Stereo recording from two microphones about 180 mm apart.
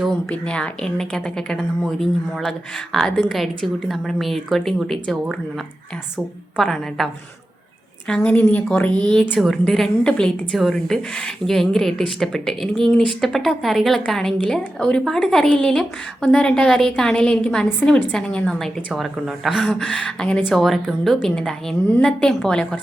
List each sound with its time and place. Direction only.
0.0 s a woman's voice: 5° left (ahead or behind)
6.6 s a woman's voice: centre (ahead or behind)
8.9 s speech: 25° right (ahead or behind)
9.3 s a woman's voice: centre (ahead or behind)